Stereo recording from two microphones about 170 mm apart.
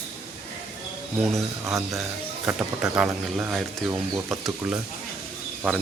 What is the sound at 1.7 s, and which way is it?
Speech, centre (ahead or behind).